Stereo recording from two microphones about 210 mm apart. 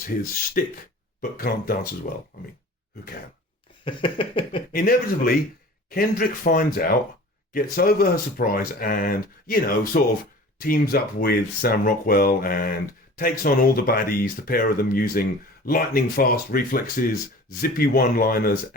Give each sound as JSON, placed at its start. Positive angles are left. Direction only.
{"t": 0.0, "sound": "speech", "side_deg": 40}
{"t": 3.8, "sound": "a sound", "side_deg": 25}
{"t": 4.7, "sound": "speech", "side_deg": 45}